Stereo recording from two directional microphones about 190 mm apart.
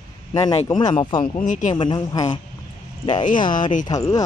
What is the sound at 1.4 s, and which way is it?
Speech, 40° left (ahead or behind).